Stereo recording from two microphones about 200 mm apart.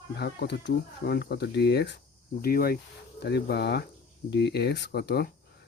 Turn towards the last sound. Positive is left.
turn(degrees=55)  # may be behind; listen again after turning